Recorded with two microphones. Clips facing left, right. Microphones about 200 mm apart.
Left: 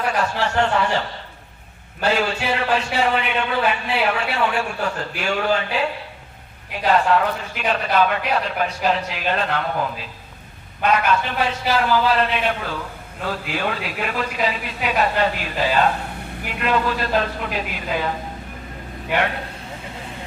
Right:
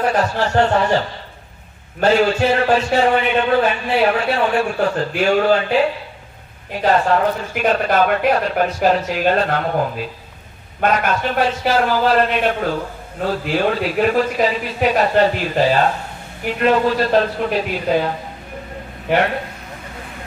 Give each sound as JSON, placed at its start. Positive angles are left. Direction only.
{"t": 0.0, "sound": "a man's voice", "side_deg": -40}
{"t": 6.8, "sound": "a man's voice", "side_deg": -40}